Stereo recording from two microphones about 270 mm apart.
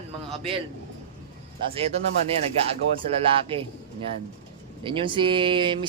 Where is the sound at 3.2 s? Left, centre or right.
Centre.